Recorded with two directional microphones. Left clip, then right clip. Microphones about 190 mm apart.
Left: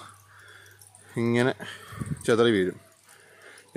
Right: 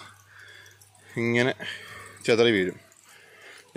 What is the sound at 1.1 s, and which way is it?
Speech, 20° left (ahead or behind).